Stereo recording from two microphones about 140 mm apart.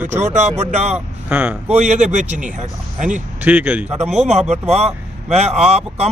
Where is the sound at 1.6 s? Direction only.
55° right (ahead or behind).